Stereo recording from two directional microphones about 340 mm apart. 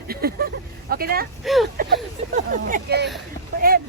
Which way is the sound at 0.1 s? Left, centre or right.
Right.